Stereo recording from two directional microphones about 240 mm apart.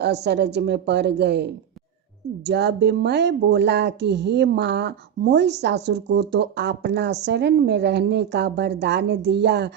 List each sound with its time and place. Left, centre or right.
0.0 s speech: right